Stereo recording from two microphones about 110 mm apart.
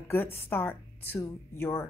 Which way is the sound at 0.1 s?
20° left (ahead or behind).